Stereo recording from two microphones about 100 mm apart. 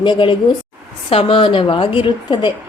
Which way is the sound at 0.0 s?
55° left (ahead or behind).